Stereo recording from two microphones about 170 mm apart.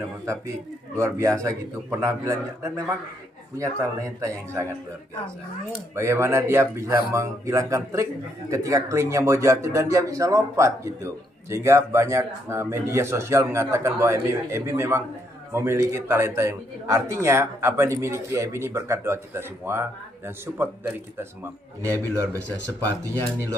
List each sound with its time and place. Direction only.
0.9 s a man's voice: 15° right (ahead or behind)
5.9 s a man's voice: 15° right (ahead or behind)